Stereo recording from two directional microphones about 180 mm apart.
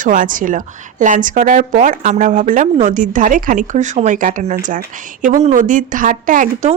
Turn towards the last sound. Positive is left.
turn(degrees=-45)  # may be behind; listen again after turning